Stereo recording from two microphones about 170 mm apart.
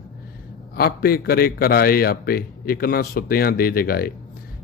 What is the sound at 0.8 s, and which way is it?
A man's voice, 60° left (ahead or behind).